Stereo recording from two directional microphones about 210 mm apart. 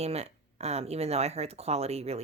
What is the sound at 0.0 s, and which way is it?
Speech, 30° right (ahead or behind).